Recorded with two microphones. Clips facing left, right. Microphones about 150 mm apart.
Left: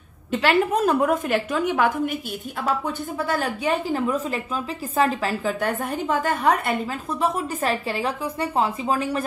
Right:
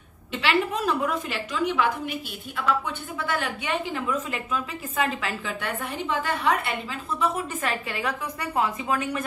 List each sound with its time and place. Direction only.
0.3 s a woman's voice: 45° left (ahead or behind)
2.6 s a woman's voice: 40° left (ahead or behind)